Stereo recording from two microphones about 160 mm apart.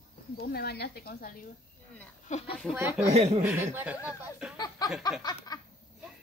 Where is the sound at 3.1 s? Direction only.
40° right (ahead or behind).